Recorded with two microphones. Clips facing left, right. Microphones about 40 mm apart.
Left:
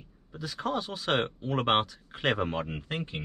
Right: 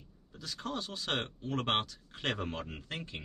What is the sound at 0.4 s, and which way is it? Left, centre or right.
Speech, centre.